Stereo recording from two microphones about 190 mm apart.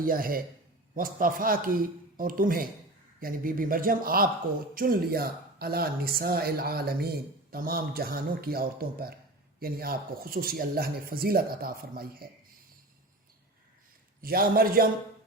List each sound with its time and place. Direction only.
0.0 s speech: 50° right (ahead or behind)
14.2 s speech: 50° right (ahead or behind)